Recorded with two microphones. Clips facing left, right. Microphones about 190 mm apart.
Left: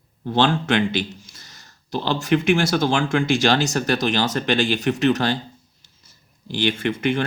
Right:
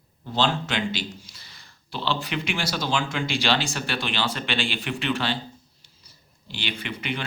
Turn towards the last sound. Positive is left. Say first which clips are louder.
# left 10 dB
turn(degrees=45)  # may be behind; listen again after turning